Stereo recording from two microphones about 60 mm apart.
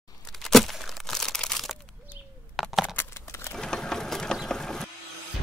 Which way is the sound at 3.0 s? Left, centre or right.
Left.